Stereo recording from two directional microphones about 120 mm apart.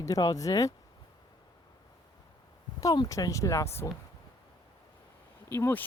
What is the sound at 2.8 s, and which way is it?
Speech, 35° left (ahead or behind).